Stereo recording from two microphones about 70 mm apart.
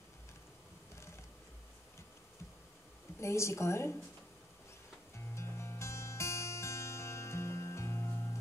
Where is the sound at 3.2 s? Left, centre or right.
Left.